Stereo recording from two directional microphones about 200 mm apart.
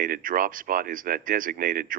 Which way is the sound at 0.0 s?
45° right (ahead or behind).